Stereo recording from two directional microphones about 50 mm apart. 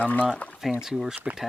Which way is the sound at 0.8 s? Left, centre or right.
Centre.